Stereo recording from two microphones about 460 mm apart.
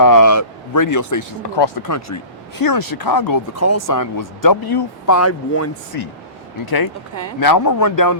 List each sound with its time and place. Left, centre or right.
0.0 s speech: left
1.6 s speech: left
1.9 s speech: left
5.0 s speech: left
5.9 s speech: left